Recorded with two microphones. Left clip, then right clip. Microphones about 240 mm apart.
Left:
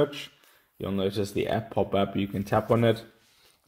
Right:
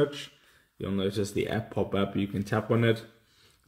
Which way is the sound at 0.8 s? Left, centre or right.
Left.